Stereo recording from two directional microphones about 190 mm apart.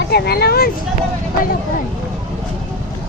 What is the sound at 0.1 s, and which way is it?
Speech, 55° left (ahead or behind).